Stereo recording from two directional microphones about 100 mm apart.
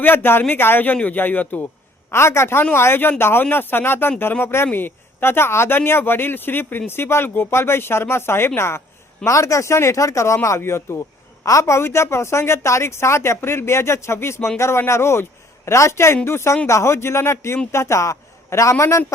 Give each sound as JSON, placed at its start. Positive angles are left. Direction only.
{"t": 0.0, "sound": "a man's voice", "side_deg": 20}